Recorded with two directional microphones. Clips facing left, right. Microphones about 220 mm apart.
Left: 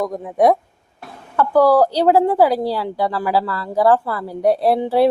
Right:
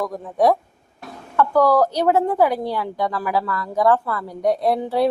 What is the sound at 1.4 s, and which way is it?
A woman's voice, 30° left (ahead or behind).